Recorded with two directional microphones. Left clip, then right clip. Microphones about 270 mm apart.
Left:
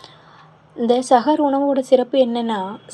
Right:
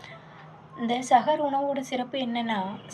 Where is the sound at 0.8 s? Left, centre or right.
Centre.